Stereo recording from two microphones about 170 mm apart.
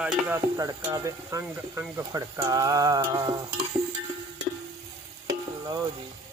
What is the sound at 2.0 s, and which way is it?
Stir, 20° right (ahead or behind).